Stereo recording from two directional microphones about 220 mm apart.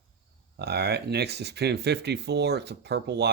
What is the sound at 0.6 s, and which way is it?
Speech, 50° right (ahead or behind).